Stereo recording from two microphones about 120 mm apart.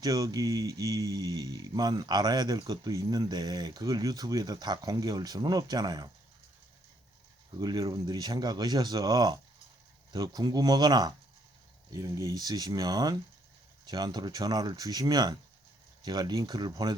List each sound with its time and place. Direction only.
0.0 s speech: 35° right (ahead or behind)
7.6 s speech: 35° right (ahead or behind)